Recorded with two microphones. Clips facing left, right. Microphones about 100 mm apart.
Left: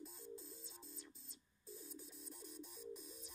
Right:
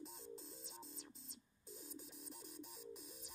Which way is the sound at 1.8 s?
20° right (ahead or behind).